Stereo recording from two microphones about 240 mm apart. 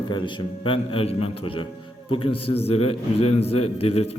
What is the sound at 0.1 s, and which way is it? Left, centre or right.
A man's voice, centre.